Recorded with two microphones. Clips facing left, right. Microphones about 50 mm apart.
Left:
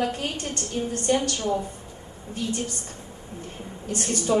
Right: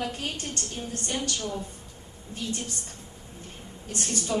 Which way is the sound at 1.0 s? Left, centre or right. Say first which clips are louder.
Left 8 dB; left.